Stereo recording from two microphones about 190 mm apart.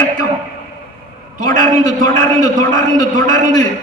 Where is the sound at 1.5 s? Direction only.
20° left (ahead or behind).